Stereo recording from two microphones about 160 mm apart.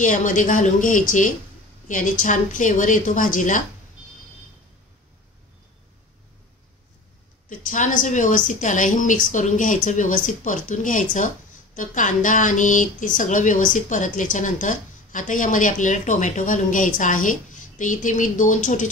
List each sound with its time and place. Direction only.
0.0 s speech: 50° left (ahead or behind)
7.4 s speech: 55° left (ahead or behind)